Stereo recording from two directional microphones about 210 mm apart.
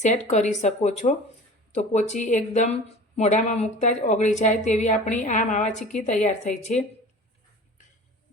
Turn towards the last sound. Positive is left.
turn(degrees=35)  # may be behind; listen again after turning